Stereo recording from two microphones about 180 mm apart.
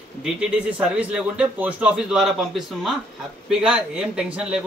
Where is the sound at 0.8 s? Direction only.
5° right (ahead or behind).